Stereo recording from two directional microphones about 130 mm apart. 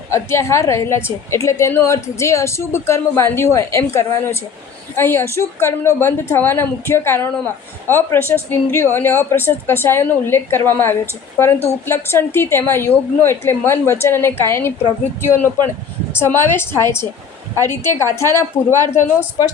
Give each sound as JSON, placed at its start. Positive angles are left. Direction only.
{"t": 0.1, "sound": "a woman's voice", "side_deg": 20}
{"t": 16.1, "sound": "a woman's voice", "side_deg": 20}